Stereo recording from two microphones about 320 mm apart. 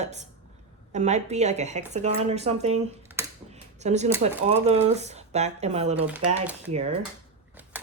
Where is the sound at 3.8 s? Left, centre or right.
Right.